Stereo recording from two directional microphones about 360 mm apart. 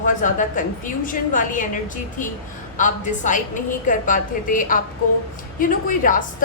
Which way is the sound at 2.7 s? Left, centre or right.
Left.